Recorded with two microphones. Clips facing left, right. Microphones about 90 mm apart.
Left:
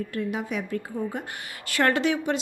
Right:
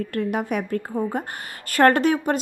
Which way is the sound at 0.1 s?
60° right (ahead or behind).